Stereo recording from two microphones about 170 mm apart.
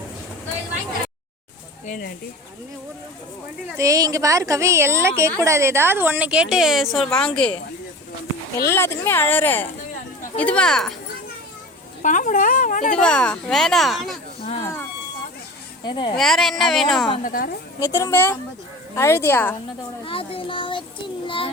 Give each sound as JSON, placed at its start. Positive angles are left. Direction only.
{"t": 1.9, "sound": "speech", "side_deg": 65}
{"t": 3.8, "sound": "a woman's voice", "side_deg": -20}
{"t": 8.5, "sound": "speech", "side_deg": 15}
{"t": 12.0, "sound": "speech", "side_deg": 50}
{"t": 13.0, "sound": "speech", "side_deg": 5}
{"t": 14.6, "sound": "a sound", "side_deg": 15}
{"t": 15.8, "sound": "speech", "side_deg": 30}
{"t": 16.1, "sound": "speech", "side_deg": 0}
{"t": 17.2, "sound": "speech", "side_deg": 55}
{"t": 17.7, "sound": "speech", "side_deg": 20}
{"t": 20.1, "sound": "a child's voice", "side_deg": 30}